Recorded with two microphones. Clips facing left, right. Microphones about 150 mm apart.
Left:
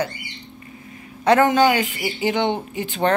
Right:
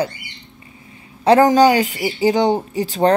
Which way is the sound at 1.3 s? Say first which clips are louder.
Right 4 dB; 35° right (ahead or behind).